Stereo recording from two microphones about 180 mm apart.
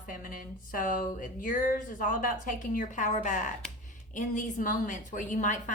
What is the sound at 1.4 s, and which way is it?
A woman's voice, 50° left (ahead or behind).